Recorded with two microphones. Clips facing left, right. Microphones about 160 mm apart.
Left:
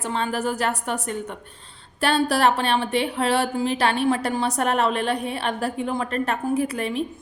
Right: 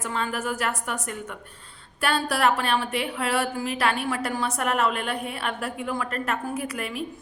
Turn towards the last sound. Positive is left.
turn(degrees=25)  # may be behind; listen again after turning